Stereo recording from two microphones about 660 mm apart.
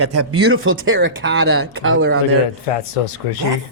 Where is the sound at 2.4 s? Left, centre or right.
Left.